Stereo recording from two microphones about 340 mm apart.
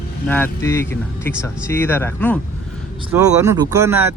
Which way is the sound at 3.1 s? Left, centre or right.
Centre.